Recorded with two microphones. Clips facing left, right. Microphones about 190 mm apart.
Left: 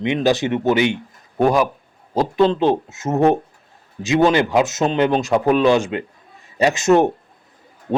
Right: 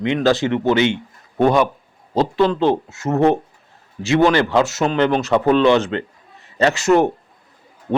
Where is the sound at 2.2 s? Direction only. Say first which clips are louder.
Even; 20° left (ahead or behind).